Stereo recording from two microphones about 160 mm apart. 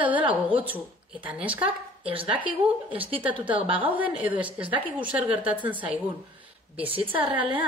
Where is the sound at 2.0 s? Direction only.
35° right (ahead or behind).